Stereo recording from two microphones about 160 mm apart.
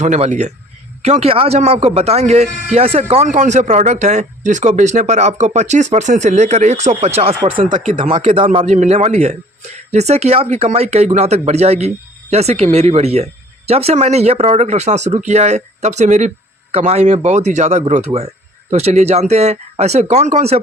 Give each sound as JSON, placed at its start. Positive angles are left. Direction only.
{"t": 0.0, "sound": "a man's voice", "side_deg": -50}